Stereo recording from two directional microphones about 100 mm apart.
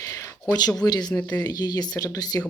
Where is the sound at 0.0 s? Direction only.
30° left (ahead or behind).